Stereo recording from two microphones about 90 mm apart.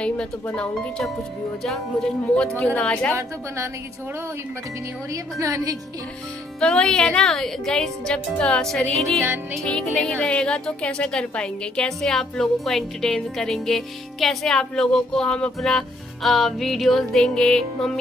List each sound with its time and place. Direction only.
0.0 s a woman's voice: 10° left (ahead or behind)
5.1 s a woman's voice: 40° right (ahead or behind)
6.6 s a woman's voice: 10° left (ahead or behind)